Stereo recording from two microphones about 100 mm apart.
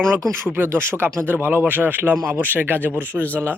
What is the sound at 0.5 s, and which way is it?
Speech, 25° right (ahead or behind).